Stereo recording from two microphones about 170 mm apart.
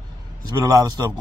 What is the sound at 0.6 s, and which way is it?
Speech, 20° right (ahead or behind).